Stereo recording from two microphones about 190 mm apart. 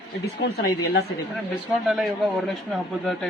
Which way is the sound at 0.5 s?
55° left (ahead or behind).